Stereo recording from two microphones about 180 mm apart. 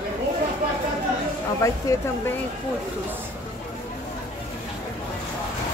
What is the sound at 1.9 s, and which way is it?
Speech, 20° left (ahead or behind).